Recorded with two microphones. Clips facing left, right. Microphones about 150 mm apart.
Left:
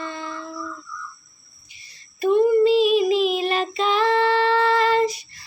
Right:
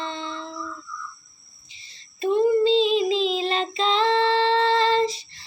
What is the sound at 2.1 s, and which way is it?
Child singing, 25° right (ahead or behind).